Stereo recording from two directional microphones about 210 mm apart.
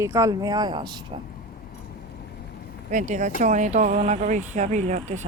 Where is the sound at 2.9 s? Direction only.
35° right (ahead or behind).